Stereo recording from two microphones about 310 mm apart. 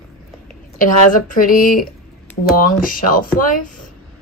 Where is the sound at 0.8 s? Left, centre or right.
Left.